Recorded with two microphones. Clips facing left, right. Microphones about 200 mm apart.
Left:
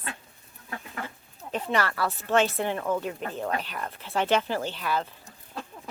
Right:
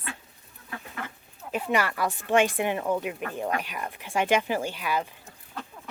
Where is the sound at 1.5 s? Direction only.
10° right (ahead or behind).